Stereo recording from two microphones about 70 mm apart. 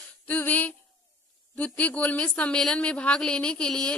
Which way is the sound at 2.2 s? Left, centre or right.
Centre.